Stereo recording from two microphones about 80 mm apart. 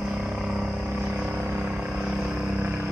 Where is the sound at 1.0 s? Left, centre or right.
Centre.